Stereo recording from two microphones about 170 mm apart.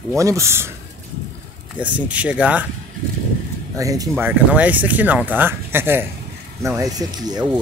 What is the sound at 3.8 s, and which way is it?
Speech, 20° right (ahead or behind).